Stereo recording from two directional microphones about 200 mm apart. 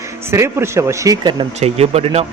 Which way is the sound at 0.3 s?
15° right (ahead or behind).